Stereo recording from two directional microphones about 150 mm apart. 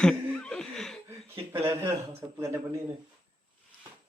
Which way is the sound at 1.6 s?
15° right (ahead or behind).